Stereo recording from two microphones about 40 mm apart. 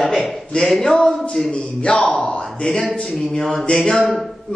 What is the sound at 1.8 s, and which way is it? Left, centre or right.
A man's voice, left.